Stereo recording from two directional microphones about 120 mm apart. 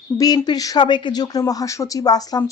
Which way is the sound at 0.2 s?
35° left (ahead or behind).